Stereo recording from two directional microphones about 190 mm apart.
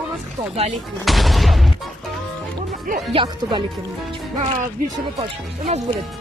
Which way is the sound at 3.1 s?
25° right (ahead or behind).